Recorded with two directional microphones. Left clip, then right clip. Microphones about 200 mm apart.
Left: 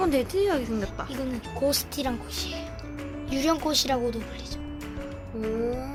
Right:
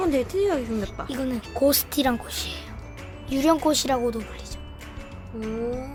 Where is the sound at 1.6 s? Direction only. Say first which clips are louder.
Right 5 dB; 45° right (ahead or behind).